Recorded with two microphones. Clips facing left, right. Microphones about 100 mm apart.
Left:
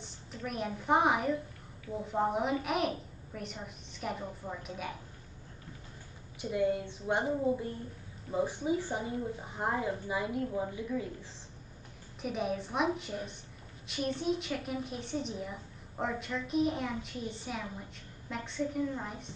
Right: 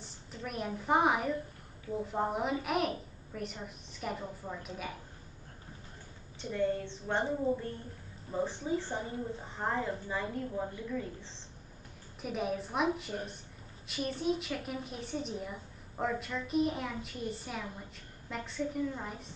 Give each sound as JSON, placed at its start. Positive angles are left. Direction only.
{"t": 0.0, "sound": "a woman's voice", "side_deg": 0}
{"t": 6.4, "sound": "a woman's voice", "side_deg": 10}
{"t": 12.2, "sound": "a woman's voice", "side_deg": 0}
{"t": 13.1, "sound": "speech", "side_deg": -40}
{"t": 13.8, "sound": "a woman's voice", "side_deg": 0}